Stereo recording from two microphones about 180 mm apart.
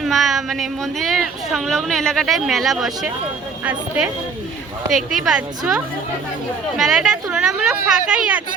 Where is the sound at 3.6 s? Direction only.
5° right (ahead or behind).